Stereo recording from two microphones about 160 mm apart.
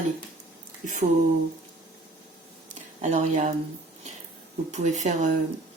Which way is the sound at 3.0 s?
50° right (ahead or behind).